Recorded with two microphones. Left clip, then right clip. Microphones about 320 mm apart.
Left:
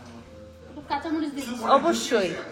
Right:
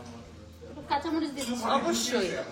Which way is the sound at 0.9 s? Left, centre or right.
Centre.